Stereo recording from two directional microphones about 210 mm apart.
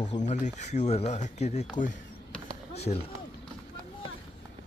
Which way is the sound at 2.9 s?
30° left (ahead or behind).